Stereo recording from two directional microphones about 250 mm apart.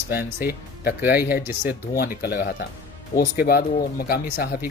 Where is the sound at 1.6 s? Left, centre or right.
Left.